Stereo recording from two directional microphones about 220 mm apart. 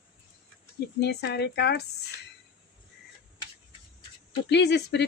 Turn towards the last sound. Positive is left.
turn(degrees=50)  # may be behind; listen again after turning